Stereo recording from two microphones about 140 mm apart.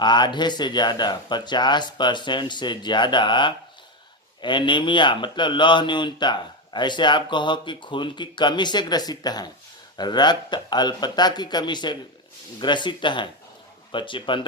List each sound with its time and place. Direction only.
0.0 s speech: 30° left (ahead or behind)